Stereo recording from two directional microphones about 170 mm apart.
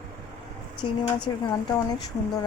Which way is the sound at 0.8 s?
25° left (ahead or behind).